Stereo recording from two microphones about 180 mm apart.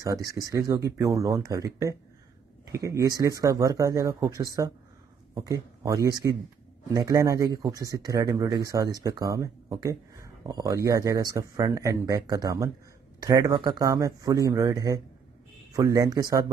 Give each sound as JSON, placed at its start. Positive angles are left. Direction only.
{"t": 0.0, "sound": "speech", "side_deg": -20}